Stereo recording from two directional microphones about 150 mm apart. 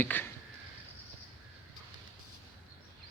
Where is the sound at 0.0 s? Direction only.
15° left (ahead or behind).